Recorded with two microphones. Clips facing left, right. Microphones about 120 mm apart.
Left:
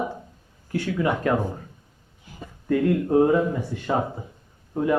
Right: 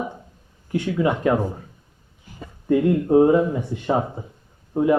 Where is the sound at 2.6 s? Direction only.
20° right (ahead or behind).